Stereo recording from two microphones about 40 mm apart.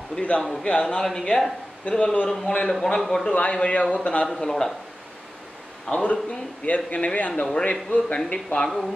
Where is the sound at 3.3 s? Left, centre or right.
Left.